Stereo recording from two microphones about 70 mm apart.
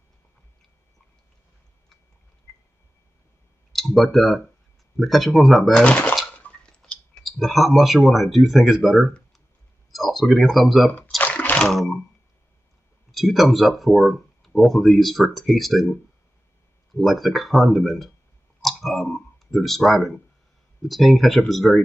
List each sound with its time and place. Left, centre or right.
3.7 s speech: centre
5.8 s speech: centre
6.2 s a sound: centre
7.2 s speech: centre
11.1 s a sound: left
11.6 s speech: centre
13.1 s speech: centre